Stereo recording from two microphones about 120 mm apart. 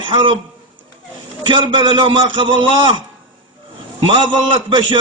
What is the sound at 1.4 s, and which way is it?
A man's voice, 40° right (ahead or behind).